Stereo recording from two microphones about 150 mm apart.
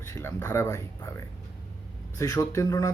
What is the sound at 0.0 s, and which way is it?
Speech, 15° left (ahead or behind).